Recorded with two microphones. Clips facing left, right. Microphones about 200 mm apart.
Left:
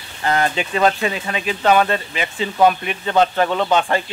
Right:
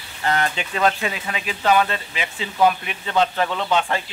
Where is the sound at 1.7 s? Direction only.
50° left (ahead or behind).